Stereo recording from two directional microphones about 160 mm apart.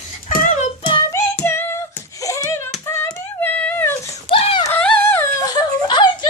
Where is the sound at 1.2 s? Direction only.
15° left (ahead or behind).